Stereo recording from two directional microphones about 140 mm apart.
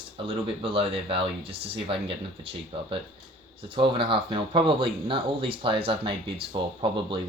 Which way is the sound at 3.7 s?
35° right (ahead or behind).